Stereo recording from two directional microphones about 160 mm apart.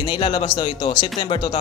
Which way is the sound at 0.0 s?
35° left (ahead or behind).